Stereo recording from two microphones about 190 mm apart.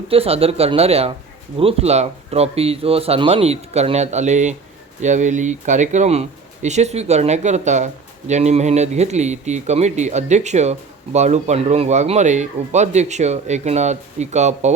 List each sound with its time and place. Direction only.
0.1 s speech: 30° right (ahead or behind)